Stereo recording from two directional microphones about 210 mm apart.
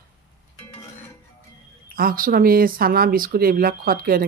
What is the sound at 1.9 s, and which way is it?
Speech, 40° right (ahead or behind).